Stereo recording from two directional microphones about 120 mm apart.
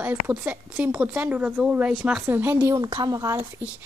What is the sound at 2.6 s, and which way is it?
Speech, 35° right (ahead or behind).